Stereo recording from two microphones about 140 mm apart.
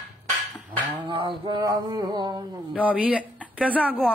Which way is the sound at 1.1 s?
35° right (ahead or behind).